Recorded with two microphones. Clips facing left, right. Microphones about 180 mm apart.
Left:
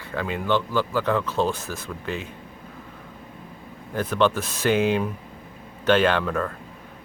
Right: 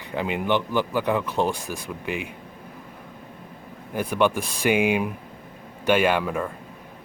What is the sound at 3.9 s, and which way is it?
Speech, 10° right (ahead or behind).